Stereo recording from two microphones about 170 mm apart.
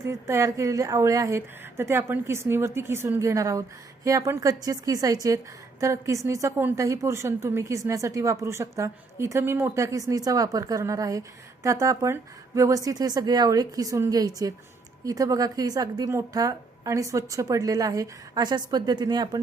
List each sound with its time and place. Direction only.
0.0 s a woman's voice: 15° right (ahead or behind)